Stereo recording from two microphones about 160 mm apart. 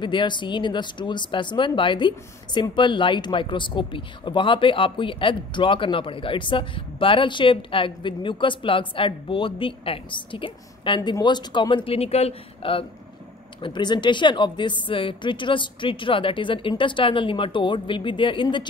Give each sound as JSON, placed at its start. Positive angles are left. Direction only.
{"t": 0.0, "sound": "speech", "side_deg": 30}